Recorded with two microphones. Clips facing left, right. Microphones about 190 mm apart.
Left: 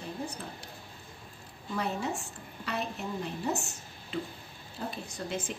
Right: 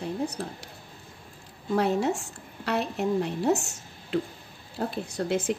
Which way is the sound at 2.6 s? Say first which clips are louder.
Right 8 dB; 75° right (ahead or behind).